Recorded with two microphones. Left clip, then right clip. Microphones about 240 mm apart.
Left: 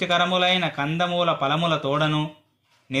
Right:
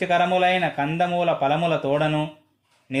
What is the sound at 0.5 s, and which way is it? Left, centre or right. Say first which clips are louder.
Speech: right 2 dB; left.